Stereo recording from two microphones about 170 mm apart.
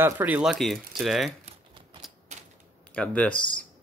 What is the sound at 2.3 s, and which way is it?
Typewriter, 40° right (ahead or behind).